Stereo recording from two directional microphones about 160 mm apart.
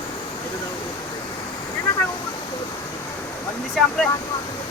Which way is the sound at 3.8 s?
Centre (ahead or behind).